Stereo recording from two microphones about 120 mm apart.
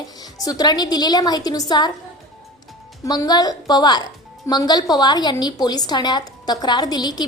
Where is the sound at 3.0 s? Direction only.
30° left (ahead or behind).